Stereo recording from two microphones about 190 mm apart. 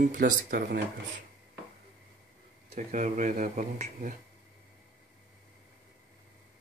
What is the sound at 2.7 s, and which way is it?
Speech, 40° right (ahead or behind).